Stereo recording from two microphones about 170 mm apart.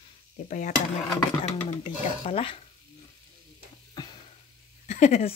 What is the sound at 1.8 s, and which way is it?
Speech, 45° left (ahead or behind).